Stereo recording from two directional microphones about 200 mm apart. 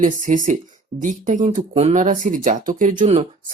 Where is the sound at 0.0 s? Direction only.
40° right (ahead or behind).